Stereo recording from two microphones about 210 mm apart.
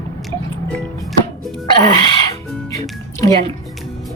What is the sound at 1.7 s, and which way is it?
Speech, 20° left (ahead or behind).